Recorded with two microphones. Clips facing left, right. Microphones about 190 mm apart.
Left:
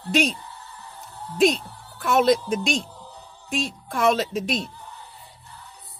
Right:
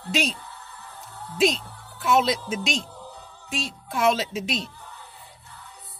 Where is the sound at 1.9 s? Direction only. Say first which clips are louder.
Left 2 dB; 50° left (ahead or behind).